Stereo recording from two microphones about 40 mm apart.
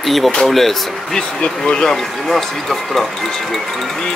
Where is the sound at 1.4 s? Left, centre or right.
Left.